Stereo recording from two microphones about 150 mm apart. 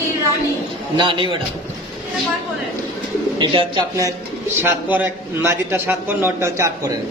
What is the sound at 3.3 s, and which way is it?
Speech, 30° right (ahead or behind).